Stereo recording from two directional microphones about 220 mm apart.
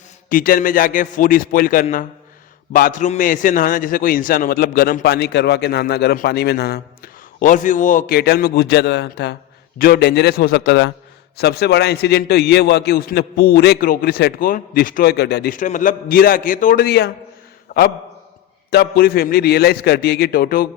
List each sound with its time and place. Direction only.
0.3 s a man's voice: 40° left (ahead or behind)
17.7 s a sound: 35° left (ahead or behind)
18.7 s a man's voice: 45° left (ahead or behind)